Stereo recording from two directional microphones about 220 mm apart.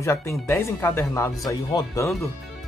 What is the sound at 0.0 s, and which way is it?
Speech, 15° left (ahead or behind).